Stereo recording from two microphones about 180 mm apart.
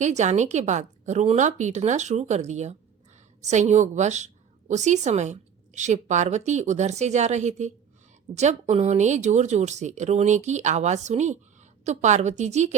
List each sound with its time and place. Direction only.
0.0 s a woman's voice: 40° right (ahead or behind)